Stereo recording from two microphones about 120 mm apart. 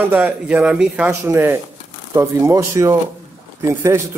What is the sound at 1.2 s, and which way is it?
Speech, 20° right (ahead or behind).